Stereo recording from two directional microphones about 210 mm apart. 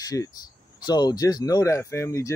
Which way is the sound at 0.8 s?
20° left (ahead or behind).